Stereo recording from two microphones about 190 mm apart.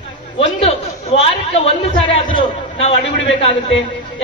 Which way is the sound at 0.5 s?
30° left (ahead or behind).